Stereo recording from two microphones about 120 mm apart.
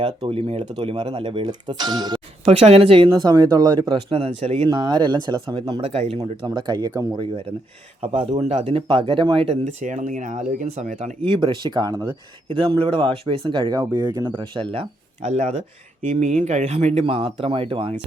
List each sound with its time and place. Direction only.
0.3 s speech: 50° right (ahead or behind)
1.5 s speech: 35° right (ahead or behind)
2.4 s speech: 60° right (ahead or behind)
3.1 s speech: 35° right (ahead or behind)
4.1 s speech: 50° right (ahead or behind)
4.7 s speech: 35° right (ahead or behind); by 6.1 s 55° right (ahead or behind)
6.1 s speech: 35° right (ahead or behind)
8.0 s speech: 45° right (ahead or behind)
8.4 s speech: 60° right (ahead or behind)
9.8 s speech: 90° right
11.2 s speech: 45° right (ahead or behind)
12.5 s speech: 45° right (ahead or behind)
15.3 s speech: 65° right (ahead or behind); by 17.9 s 50° right (ahead or behind)